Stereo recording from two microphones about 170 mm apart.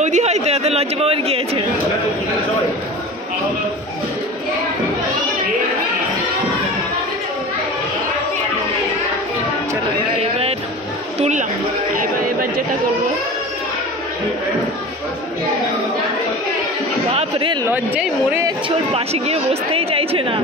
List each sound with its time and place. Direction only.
0.0 s speech: 40° right (ahead or behind)
11.1 s speech: 40° right (ahead or behind)
11.9 s speech: 55° right (ahead or behind)
17.1 s speech: 35° right (ahead or behind)
17.6 s speech: 15° right (ahead or behind)
18.9 s speech: 35° right (ahead or behind)